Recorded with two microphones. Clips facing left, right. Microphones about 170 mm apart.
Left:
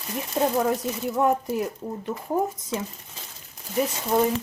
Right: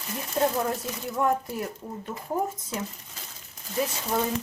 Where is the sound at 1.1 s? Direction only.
20° left (ahead or behind).